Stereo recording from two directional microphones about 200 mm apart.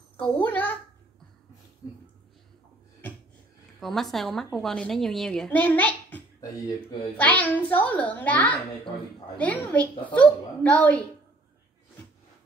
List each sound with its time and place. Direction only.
0.2 s a woman's voice: 10° left (ahead or behind)
3.8 s a woman's voice: centre (ahead or behind)